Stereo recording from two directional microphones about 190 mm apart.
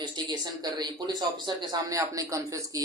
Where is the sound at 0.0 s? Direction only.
20° right (ahead or behind).